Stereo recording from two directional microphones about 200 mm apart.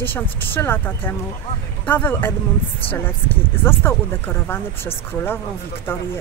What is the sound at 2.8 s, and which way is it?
Speech, 25° left (ahead or behind).